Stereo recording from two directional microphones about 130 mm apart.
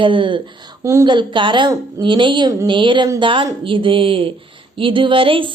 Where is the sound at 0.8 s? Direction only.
20° right (ahead or behind).